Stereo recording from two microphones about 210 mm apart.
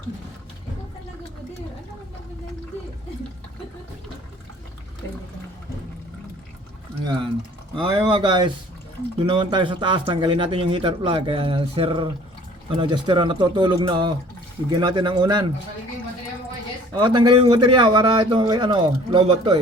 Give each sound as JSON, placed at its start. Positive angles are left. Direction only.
{"t": 7.0, "sound": "speech", "side_deg": -20}
{"t": 16.9, "sound": "speech", "side_deg": -20}